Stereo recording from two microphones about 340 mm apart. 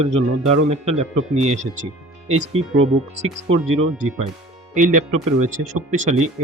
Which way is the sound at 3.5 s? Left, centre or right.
Right.